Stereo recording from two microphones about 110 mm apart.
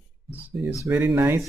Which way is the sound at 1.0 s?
10° right (ahead or behind).